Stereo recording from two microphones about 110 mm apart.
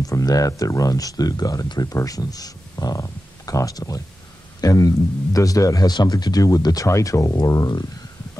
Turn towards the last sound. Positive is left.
turn(degrees=35)  # may be behind; listen again after turning